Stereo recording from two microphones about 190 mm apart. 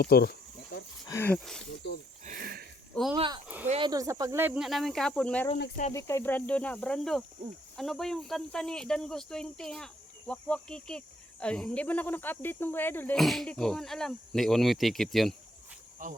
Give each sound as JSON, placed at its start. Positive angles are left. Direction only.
{"t": 0.0, "sound": "a sound", "side_deg": 55}
{"t": 1.0, "sound": "speech", "side_deg": 15}
{"t": 2.2, "sound": "a sound", "side_deg": -50}
{"t": 3.2, "sound": "speech", "side_deg": -25}
{"t": 3.4, "sound": "a sound", "side_deg": -10}
{"t": 3.7, "sound": "speech", "side_deg": -25}
{"t": 5.5, "sound": "speech", "side_deg": 60}
{"t": 5.9, "sound": "speech", "side_deg": 15}
{"t": 16.0, "sound": "cricket", "side_deg": -45}